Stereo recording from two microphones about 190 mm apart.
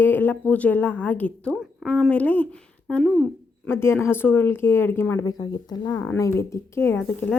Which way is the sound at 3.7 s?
10° left (ahead or behind).